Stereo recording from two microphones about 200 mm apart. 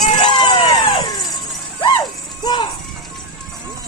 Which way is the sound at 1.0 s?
20° left (ahead or behind).